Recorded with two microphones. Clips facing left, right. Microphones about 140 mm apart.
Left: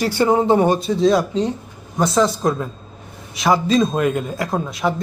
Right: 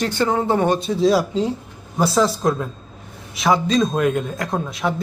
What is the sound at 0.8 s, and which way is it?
A man's voice, centre (ahead or behind).